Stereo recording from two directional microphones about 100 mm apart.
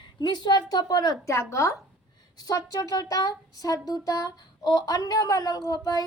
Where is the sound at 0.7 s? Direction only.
40° left (ahead or behind).